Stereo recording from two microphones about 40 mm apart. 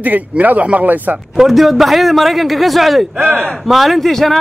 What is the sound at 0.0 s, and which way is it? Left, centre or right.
A man's voice, right.